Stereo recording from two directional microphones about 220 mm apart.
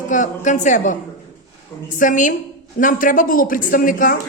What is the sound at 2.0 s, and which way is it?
A woman's voice, 35° left (ahead or behind).